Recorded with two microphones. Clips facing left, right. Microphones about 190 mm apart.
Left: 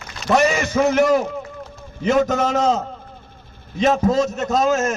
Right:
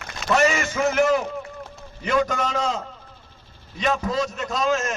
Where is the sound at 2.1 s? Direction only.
45° left (ahead or behind).